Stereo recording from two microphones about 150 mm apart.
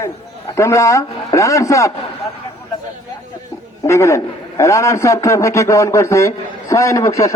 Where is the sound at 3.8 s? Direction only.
20° left (ahead or behind).